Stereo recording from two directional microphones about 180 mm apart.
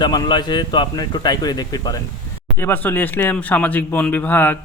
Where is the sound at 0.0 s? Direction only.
25° left (ahead or behind).